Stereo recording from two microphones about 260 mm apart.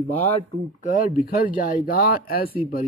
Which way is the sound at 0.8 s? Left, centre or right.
Left.